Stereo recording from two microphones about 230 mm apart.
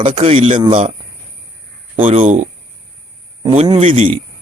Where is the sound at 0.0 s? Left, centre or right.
Right.